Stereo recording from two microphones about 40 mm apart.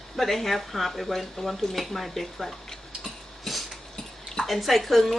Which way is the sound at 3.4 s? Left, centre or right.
Centre.